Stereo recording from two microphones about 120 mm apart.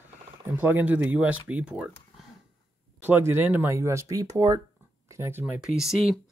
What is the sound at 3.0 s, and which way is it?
Speech, 20° right (ahead or behind).